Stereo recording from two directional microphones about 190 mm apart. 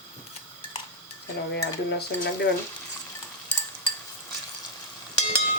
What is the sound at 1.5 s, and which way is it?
Stir, 60° left (ahead or behind).